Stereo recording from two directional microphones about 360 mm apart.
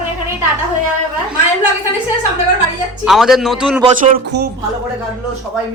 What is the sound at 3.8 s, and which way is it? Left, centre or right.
Speech, right.